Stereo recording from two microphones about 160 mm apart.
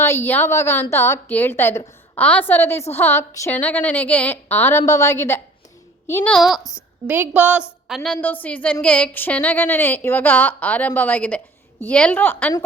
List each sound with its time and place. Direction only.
0.0 s a woman's voice: 15° left (ahead or behind)
6.3 s speech: centre (ahead or behind)
6.6 s a woman's voice: 20° left (ahead or behind)
7.1 s a woman's voice: 10° right (ahead or behind); by 12.5 s 10° left (ahead or behind)